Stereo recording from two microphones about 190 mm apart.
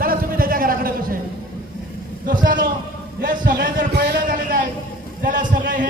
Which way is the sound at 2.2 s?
45° right (ahead or behind).